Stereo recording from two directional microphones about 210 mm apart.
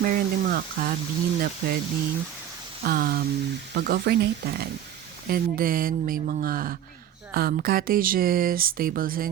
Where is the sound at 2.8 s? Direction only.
45° right (ahead or behind).